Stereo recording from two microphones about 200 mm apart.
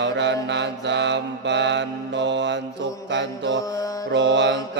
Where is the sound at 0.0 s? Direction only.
60° right (ahead or behind).